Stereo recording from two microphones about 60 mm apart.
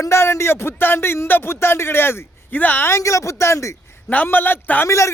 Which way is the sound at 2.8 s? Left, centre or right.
Left.